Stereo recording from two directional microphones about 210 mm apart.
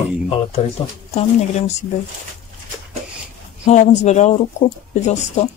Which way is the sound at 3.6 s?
35° left (ahead or behind).